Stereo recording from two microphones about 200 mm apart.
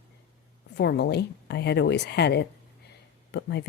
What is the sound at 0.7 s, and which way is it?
Speech, 55° left (ahead or behind).